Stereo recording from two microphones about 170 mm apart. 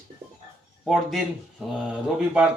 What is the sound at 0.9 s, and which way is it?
Speech, centre (ahead or behind).